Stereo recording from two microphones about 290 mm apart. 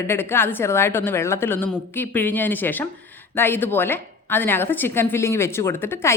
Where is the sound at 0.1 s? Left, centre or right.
Centre.